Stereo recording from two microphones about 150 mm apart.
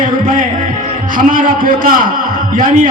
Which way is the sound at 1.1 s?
65° right (ahead or behind).